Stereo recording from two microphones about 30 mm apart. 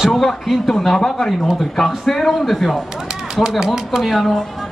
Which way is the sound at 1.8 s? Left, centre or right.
Centre.